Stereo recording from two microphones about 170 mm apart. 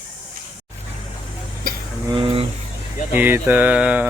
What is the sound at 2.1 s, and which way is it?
Vehicle, 30° right (ahead or behind).